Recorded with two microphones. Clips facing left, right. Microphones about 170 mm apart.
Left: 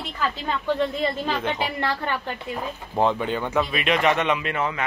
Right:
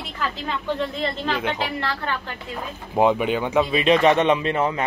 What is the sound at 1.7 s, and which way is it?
Speech, 15° left (ahead or behind).